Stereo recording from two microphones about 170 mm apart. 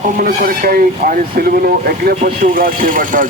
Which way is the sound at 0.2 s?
60° right (ahead or behind).